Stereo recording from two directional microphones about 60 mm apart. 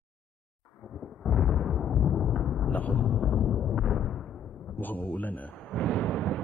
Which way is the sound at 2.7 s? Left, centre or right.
Left.